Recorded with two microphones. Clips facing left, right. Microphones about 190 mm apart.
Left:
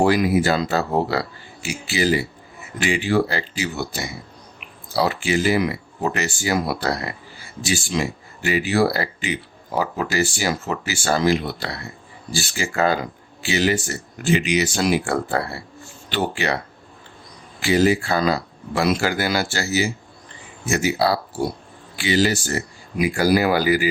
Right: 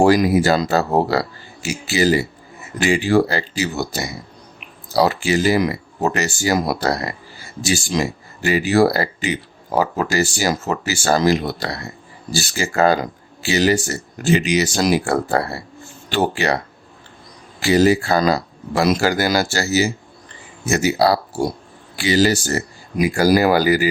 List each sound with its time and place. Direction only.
0.0 s speech: 40° right (ahead or behind)
17.6 s speech: 40° right (ahead or behind)